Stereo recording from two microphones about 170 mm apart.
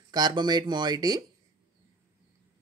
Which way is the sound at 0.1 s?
25° right (ahead or behind).